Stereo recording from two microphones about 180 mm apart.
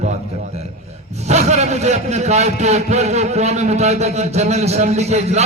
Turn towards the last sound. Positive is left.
turn(degrees=-40)  # may be behind; listen again after turning